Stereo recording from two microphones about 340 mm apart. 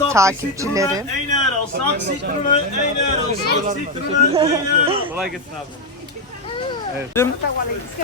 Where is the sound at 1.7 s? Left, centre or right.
Right.